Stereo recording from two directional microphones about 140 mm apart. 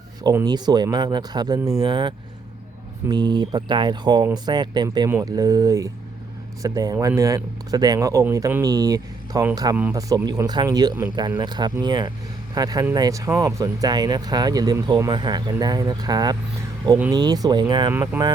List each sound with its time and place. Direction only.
0.4 s speech: 30° right (ahead or behind)
18.2 s speech: 15° right (ahead or behind)